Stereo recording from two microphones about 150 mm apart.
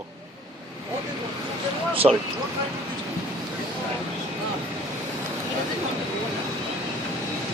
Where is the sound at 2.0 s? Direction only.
35° right (ahead or behind).